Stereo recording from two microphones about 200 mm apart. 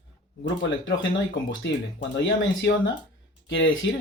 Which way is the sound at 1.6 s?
65° left (ahead or behind).